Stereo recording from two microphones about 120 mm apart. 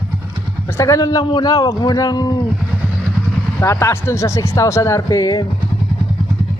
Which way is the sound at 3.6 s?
25° left (ahead or behind).